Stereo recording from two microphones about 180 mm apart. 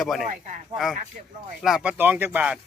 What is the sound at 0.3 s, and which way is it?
Speech, 45° right (ahead or behind).